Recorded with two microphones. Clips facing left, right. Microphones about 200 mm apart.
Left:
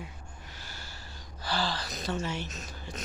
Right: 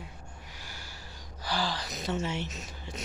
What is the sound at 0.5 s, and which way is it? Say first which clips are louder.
Gasp: left 1 dB; 15° right (ahead or behind).